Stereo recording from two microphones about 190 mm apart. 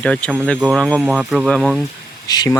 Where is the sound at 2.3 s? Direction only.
20° left (ahead or behind).